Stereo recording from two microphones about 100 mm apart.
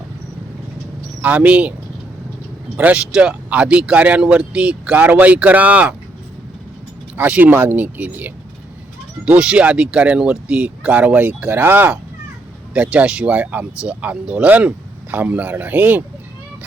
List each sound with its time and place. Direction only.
1.2 s speech: 15° right (ahead or behind)
2.7 s speech: 15° right (ahead or behind)
7.2 s speech: 15° right (ahead or behind)